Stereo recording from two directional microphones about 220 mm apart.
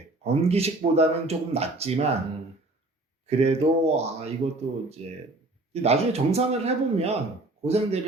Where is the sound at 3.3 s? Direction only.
30° right (ahead or behind).